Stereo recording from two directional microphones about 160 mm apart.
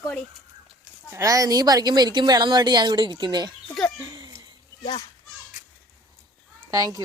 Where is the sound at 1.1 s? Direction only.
20° right (ahead or behind).